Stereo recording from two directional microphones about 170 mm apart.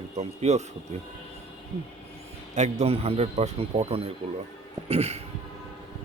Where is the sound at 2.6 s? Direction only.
40° right (ahead or behind).